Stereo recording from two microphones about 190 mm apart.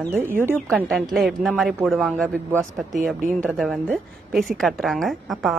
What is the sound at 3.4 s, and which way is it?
A woman's voice, centre (ahead or behind).